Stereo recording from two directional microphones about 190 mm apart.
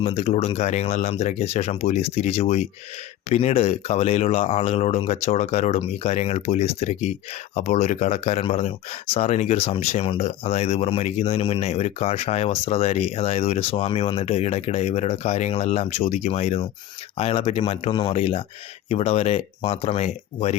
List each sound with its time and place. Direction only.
0.0 s speech: 30° left (ahead or behind)